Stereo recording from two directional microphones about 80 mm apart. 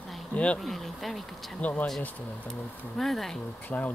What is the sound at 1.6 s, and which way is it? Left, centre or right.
Speech, centre.